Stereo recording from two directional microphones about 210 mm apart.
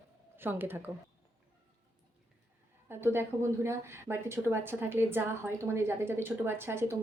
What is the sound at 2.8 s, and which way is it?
A woman's voice, 10° right (ahead or behind).